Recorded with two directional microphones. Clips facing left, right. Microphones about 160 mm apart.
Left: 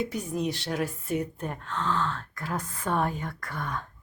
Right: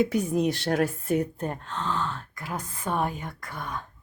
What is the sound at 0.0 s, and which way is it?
A woman's voice, 70° right (ahead or behind).